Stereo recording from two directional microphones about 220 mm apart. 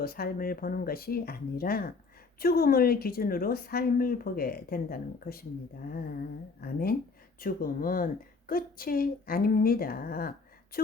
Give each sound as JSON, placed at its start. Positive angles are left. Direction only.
{"t": 0.0, "sound": "a woman's voice", "side_deg": 45}
{"t": 6.6, "sound": "a woman's voice", "side_deg": 45}